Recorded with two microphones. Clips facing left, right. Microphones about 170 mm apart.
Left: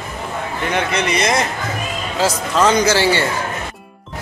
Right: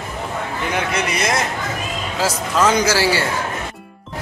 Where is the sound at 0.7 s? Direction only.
5° right (ahead or behind).